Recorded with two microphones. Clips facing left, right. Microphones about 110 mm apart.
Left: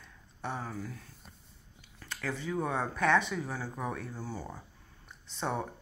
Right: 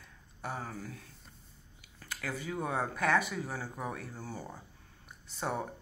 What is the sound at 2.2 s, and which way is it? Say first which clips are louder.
Speech: left 3 dB; 10° right (ahead or behind).